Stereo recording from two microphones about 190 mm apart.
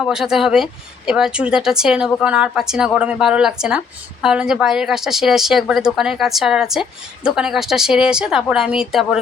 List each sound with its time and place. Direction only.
0.1 s speech: 5° right (ahead or behind)